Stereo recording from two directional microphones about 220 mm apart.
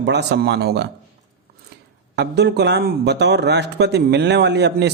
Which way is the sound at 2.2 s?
50° right (ahead or behind).